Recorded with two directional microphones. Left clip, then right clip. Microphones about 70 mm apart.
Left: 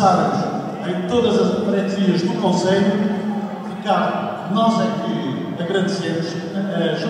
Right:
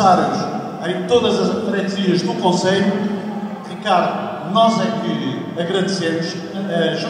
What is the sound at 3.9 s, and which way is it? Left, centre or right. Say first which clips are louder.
A man's voice: right 2 dB; right.